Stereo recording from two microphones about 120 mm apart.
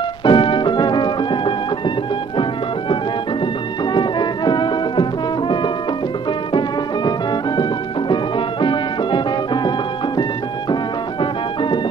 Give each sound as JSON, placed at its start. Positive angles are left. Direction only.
{"t": 0.2, "sound": "music", "side_deg": 45}
{"t": 3.9, "sound": "music", "side_deg": 40}
{"t": 8.1, "sound": "music", "side_deg": 40}